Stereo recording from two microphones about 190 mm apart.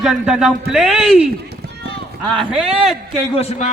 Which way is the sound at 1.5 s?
60° right (ahead or behind).